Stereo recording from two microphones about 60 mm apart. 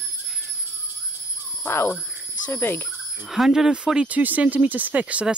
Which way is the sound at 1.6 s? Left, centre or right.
Left.